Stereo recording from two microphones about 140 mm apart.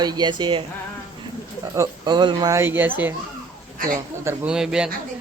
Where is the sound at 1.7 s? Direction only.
25° right (ahead or behind).